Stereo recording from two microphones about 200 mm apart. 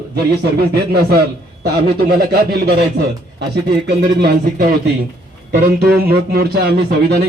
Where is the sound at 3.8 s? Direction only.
55° right (ahead or behind).